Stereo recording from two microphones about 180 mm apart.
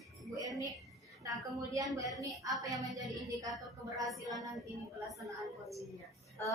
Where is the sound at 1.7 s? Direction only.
20° right (ahead or behind).